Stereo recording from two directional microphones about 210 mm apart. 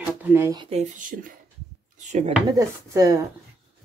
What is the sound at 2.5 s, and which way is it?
Speech, 15° right (ahead or behind).